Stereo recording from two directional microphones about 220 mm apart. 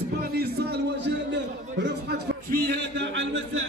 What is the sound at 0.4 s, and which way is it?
A man's voice, 50° right (ahead or behind).